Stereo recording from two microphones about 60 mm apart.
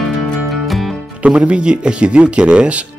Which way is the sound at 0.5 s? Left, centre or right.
Centre.